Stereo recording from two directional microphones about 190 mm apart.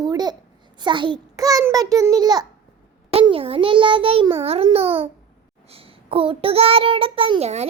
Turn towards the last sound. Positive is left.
turn(degrees=-35)  # may be behind; listen again after turning